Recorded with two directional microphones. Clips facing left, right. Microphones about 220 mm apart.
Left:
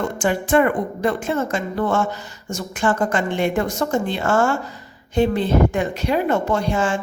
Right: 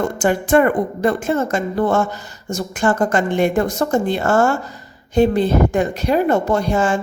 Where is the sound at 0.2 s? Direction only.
40° right (ahead or behind).